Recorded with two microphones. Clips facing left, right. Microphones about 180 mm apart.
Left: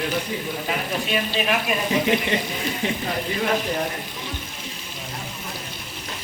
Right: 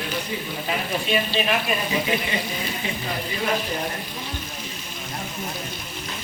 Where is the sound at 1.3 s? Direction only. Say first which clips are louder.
Even; 10° left (ahead or behind).